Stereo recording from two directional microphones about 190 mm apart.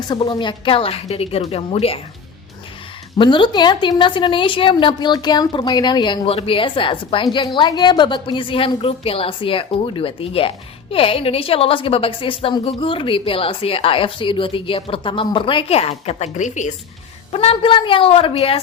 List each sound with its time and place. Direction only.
0.1 s a woman's voice: 25° left (ahead or behind)
3.2 s a woman's voice: 25° left (ahead or behind)